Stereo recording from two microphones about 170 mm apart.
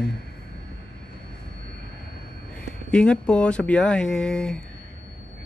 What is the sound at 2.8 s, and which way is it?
Speech, 5° left (ahead or behind).